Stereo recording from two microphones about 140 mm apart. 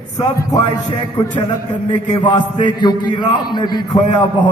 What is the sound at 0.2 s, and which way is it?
Speech, 25° left (ahead or behind).